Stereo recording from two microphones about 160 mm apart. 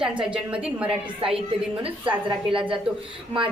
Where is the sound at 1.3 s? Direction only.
35° right (ahead or behind).